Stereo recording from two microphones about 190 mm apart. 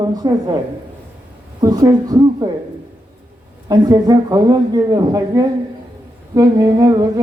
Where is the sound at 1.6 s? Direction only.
20° right (ahead or behind).